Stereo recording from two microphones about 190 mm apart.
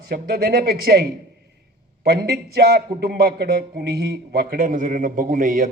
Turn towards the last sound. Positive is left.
turn(degrees=-45)  # may be behind; listen again after turning